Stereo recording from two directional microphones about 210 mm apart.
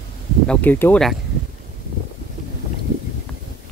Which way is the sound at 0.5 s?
10° left (ahead or behind).